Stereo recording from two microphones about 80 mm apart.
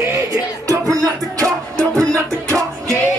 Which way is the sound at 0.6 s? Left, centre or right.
Right.